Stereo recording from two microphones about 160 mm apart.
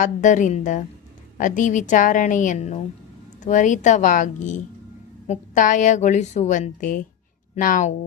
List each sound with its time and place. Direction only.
0.0 s a woman's voice: 50° left (ahead or behind)